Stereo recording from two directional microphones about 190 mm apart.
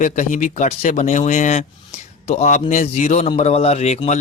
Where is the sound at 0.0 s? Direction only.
40° left (ahead or behind).